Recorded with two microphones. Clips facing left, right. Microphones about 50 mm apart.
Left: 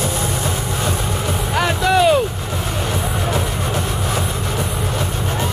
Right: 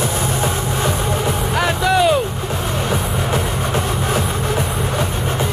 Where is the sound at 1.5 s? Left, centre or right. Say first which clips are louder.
Left 1 dB; centre.